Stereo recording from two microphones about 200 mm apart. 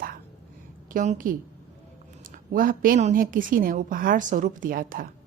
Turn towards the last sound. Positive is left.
turn(degrees=-45)  # may be behind; listen again after turning